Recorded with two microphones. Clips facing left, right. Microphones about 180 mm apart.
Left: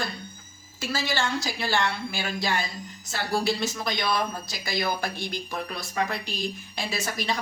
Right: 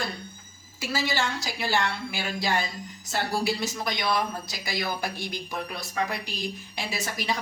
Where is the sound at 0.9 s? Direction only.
15° right (ahead or behind).